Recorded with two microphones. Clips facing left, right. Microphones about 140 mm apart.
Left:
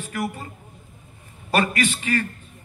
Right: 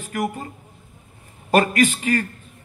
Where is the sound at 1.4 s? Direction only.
45° right (ahead or behind).